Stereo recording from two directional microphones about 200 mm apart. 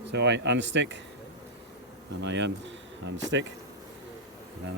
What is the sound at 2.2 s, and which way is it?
Speech, 65° right (ahead or behind).